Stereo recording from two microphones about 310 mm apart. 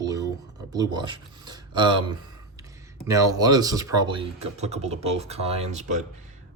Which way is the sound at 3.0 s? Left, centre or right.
Centre.